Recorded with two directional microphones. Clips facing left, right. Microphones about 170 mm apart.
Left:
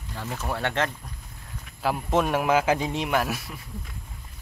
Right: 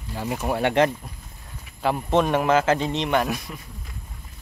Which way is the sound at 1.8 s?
Centre (ahead or behind).